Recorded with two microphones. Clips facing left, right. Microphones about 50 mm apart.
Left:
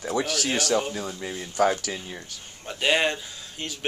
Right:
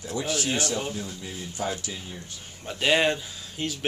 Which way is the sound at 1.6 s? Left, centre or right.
Left.